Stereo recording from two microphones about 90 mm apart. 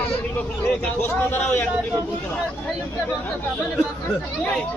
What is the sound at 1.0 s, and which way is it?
Speech, 20° left (ahead or behind).